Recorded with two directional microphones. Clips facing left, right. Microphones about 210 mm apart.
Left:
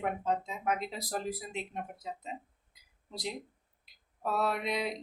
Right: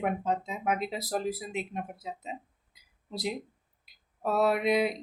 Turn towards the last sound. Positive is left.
turn(degrees=-5)  # may be behind; listen again after turning